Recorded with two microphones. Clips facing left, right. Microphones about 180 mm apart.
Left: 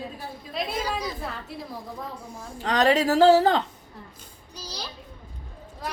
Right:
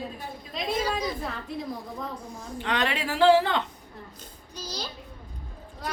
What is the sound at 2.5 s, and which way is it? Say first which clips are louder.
A man's voice: left 7 dB; 40° left (ahead or behind).